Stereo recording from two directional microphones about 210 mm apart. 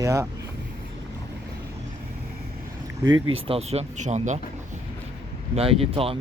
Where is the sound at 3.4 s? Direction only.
30° right (ahead or behind).